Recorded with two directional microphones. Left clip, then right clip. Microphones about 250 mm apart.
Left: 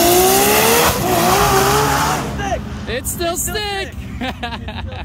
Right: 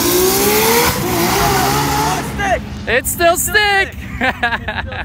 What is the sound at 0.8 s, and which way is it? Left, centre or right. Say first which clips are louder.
Vehicle: left 1 dB; left.